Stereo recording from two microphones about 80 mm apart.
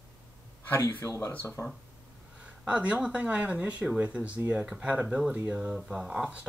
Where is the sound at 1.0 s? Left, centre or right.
Left.